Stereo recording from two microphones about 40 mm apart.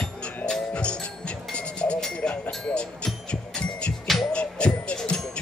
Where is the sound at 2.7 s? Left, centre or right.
Left.